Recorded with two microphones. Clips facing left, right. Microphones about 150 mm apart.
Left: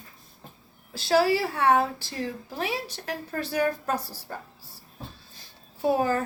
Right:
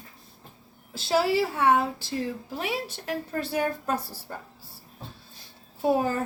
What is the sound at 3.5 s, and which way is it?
Speech, 25° right (ahead or behind).